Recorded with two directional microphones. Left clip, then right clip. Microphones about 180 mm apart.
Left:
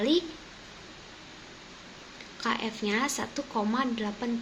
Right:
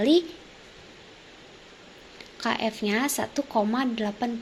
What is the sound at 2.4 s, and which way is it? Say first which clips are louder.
Speech: right 4 dB; 30° right (ahead or behind).